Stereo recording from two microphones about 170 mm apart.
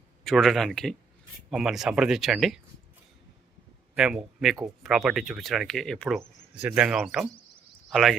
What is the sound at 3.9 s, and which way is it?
A man's voice, 5° right (ahead or behind).